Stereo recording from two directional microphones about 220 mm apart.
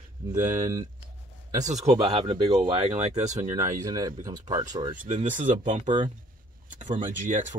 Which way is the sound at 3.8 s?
15° right (ahead or behind).